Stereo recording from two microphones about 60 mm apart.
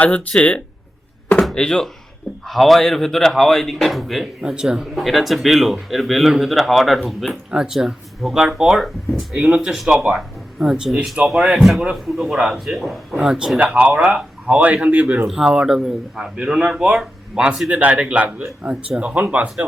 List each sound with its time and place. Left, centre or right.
0.0 s speech: left
1.5 s speech: centre
13.6 s speech: right